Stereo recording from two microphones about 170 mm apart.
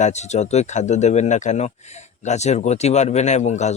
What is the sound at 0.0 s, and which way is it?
A man's voice, 40° left (ahead or behind).